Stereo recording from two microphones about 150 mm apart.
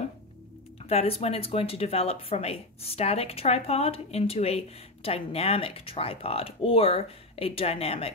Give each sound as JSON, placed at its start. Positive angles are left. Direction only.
{"t": 0.8, "sound": "speech", "side_deg": 40}